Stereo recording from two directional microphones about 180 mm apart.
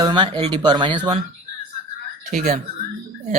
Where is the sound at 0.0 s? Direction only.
25° right (ahead or behind).